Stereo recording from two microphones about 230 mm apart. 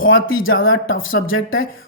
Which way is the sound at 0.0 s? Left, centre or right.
Left.